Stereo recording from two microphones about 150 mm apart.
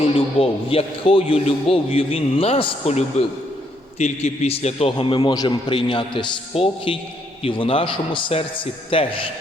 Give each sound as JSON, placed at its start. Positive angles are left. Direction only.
{"t": 0.0, "sound": "a man's voice", "side_deg": 40}